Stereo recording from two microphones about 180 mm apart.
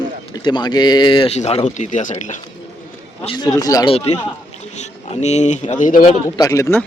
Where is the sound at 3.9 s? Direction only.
35° left (ahead or behind).